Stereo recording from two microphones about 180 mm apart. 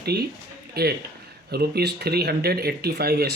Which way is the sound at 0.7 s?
60° right (ahead or behind).